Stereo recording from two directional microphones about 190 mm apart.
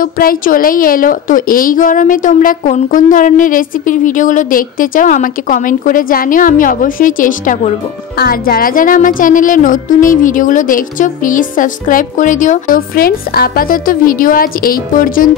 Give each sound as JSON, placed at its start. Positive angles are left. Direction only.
{"t": 0.0, "sound": "a woman's voice", "side_deg": 50}